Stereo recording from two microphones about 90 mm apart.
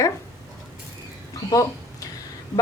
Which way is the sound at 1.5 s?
45° left (ahead or behind).